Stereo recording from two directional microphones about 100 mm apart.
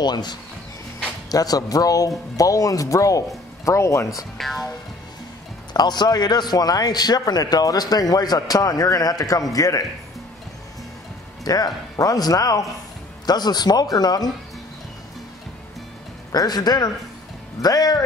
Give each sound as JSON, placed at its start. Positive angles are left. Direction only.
{"t": 0.0, "sound": "a man's voice", "side_deg": 45}
{"t": 4.4, "sound": "speech", "side_deg": 0}
{"t": 5.7, "sound": "a man's voice", "side_deg": 45}
{"t": 11.4, "sound": "a man's voice", "side_deg": 40}
{"t": 16.3, "sound": "a man's voice", "side_deg": 40}